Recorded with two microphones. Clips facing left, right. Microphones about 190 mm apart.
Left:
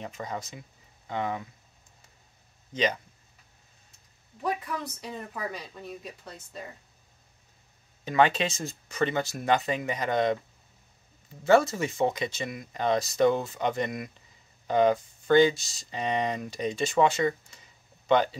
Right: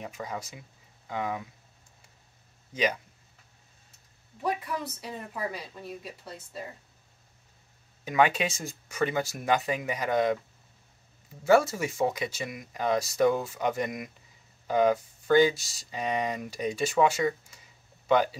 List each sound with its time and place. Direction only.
0.0 s speech: 10° right (ahead or behind)
2.7 s speech: 10° right (ahead or behind)
4.4 s speech: 5° right (ahead or behind)
8.0 s speech: 10° right (ahead or behind)
11.4 s speech: 10° right (ahead or behind)